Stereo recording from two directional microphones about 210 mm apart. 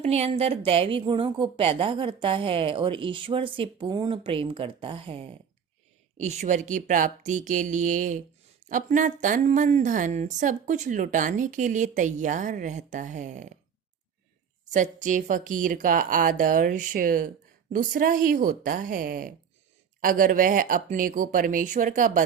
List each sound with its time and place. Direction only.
0.0 s a woman's voice: 30° right (ahead or behind)
14.6 s a woman's voice: 35° right (ahead or behind)